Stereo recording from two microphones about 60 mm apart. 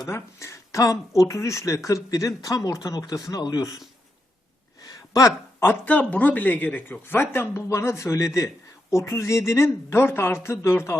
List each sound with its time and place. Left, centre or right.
0.1 s speech: left
4.9 s a sound: left
5.8 s speech: left